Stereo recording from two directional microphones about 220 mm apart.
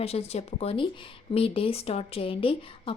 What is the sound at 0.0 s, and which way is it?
Speech, 25° left (ahead or behind).